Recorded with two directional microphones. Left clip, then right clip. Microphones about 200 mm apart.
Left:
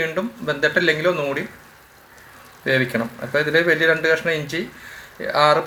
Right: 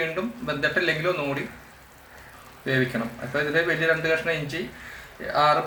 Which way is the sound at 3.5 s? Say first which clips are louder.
Left 6 dB; 35° left (ahead or behind).